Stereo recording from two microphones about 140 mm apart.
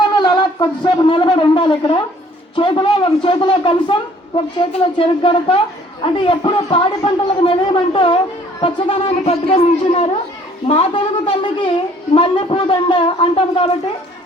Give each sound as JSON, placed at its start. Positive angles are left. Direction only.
{"t": 0.2, "sound": "a man's voice", "side_deg": 30}